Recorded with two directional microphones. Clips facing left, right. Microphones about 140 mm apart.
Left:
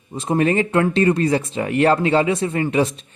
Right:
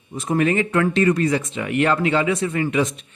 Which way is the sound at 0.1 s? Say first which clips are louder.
Left 1 dB; 25° left (ahead or behind).